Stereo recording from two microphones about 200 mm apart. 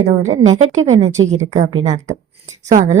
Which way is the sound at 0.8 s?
35° right (ahead or behind).